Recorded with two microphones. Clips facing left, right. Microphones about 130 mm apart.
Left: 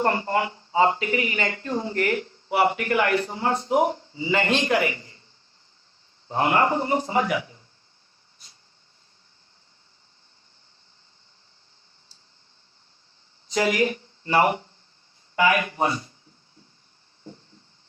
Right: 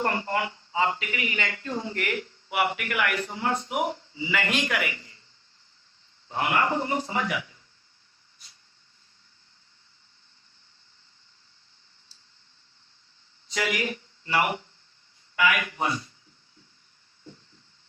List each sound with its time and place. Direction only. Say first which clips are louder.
0.0 s speech: left 4 dB; 30° left (ahead or behind)
6.2 s speech: left 4 dB; 30° left (ahead or behind)
13.5 s speech: left 7 dB; 30° left (ahead or behind)